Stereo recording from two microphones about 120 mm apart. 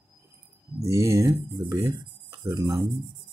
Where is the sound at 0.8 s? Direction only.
25° right (ahead or behind).